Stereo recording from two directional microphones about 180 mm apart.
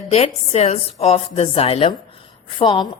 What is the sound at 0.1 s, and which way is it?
A woman's voice, 35° left (ahead or behind).